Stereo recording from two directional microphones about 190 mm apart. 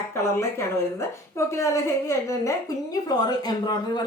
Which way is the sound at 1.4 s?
15° left (ahead or behind).